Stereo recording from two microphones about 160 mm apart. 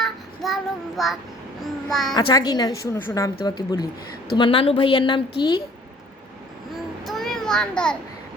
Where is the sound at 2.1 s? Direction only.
25° left (ahead or behind).